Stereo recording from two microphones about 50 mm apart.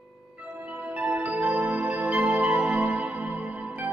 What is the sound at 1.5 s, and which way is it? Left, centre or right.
Music, right.